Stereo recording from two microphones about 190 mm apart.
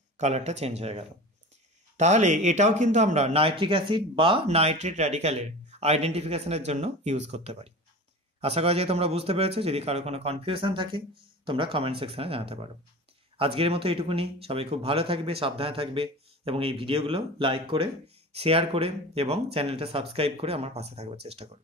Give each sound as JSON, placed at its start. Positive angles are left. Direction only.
{"t": 0.2, "sound": "speech", "side_deg": -35}